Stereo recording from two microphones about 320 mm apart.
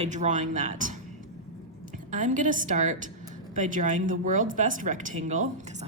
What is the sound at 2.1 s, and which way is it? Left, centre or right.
A woman's voice, right.